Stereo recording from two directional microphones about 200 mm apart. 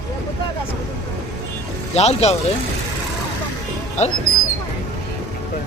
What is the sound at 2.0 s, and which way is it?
Speech, 30° left (ahead or behind).